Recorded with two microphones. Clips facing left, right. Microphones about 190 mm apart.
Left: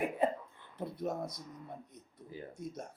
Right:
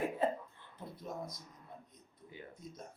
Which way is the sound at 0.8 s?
65° left (ahead or behind).